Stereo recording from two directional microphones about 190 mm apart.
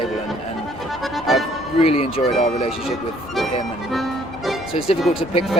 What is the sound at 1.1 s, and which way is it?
Speech, centre (ahead or behind).